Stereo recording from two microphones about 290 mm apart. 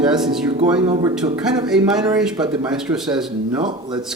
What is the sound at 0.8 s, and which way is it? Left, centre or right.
Speech, centre.